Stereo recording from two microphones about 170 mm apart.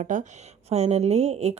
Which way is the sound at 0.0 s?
45° right (ahead or behind).